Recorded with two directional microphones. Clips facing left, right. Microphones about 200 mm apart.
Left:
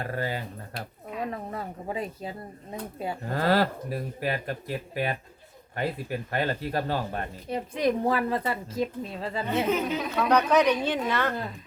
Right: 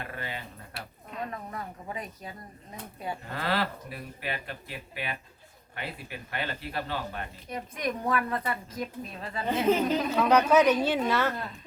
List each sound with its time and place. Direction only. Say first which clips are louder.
0.0 s speech: left 7 dB; 40° left (ahead or behind)
1.3 s speech: left 4 dB; 30° left (ahead or behind)
3.2 s speech: left 7 dB; 40° left (ahead or behind)
7.5 s a woman's voice: left 7 dB; 30° left (ahead or behind)
9.8 s a woman's voice: right 2 dB; centre (ahead or behind)